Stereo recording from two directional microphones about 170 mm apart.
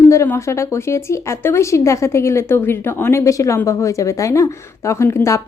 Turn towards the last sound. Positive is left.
turn(degrees=15)  # may be behind; listen again after turning